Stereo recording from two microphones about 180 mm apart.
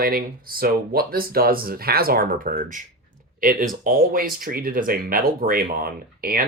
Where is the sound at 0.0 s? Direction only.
55° right (ahead or behind).